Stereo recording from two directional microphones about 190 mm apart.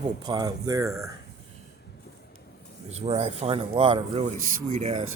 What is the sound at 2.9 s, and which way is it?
A man's voice, 35° right (ahead or behind).